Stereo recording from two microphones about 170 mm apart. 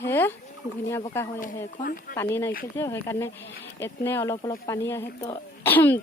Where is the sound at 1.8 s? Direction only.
60° left (ahead or behind).